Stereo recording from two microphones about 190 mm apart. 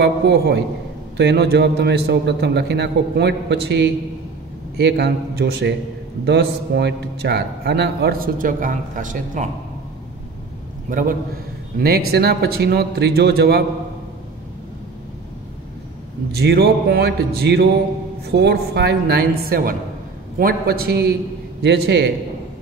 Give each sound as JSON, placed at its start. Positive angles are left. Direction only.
{"t": 0.0, "sound": "a man's voice", "side_deg": -60}
{"t": 10.9, "sound": "a man's voice", "side_deg": -45}
{"t": 12.1, "sound": "a man's voice", "side_deg": -55}
{"t": 16.3, "sound": "a man's voice", "side_deg": -55}